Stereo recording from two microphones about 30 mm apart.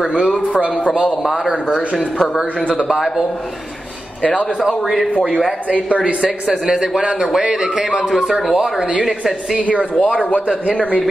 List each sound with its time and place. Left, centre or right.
0.0 s a man's voice: right
5.9 s speech: right
6.6 s a man's voice: right
8.0 s speech: centre
10.0 s a man's voice: left